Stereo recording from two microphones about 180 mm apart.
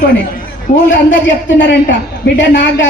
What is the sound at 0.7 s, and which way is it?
Speech, 45° left (ahead or behind).